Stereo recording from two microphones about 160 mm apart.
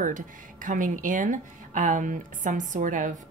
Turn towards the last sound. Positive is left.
turn(degrees=-55)  # may be behind; listen again after turning